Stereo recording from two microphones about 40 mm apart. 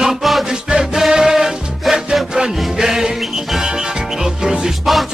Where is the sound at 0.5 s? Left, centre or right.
Centre.